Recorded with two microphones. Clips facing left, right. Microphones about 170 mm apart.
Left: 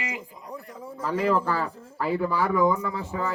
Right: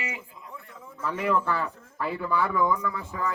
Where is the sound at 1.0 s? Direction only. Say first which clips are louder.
Left 2 dB; 30° left (ahead or behind).